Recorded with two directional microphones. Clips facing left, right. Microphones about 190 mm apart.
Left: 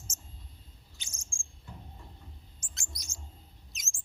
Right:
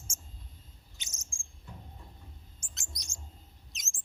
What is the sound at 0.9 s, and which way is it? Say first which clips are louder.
Cricket: left 1 dB; 20° right (ahead or behind).